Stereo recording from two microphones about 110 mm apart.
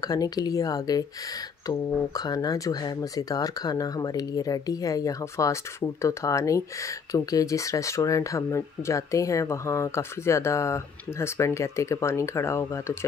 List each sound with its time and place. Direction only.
0.0 s speech: 35° left (ahead or behind)